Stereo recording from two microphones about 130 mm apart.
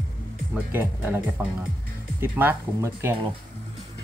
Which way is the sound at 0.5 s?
15° right (ahead or behind).